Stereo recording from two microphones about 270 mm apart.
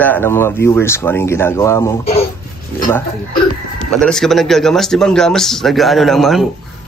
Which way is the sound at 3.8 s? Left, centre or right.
Centre.